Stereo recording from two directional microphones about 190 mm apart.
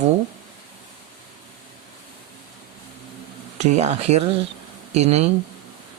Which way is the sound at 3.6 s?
35° right (ahead or behind).